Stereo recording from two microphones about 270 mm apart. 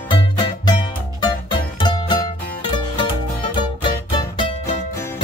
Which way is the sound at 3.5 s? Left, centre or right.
Centre.